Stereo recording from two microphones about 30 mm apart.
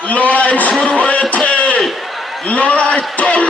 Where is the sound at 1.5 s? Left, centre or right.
Left.